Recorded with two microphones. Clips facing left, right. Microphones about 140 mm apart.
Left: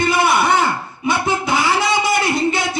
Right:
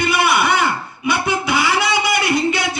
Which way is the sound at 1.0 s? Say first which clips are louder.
Left 1 dB; 40° left (ahead or behind).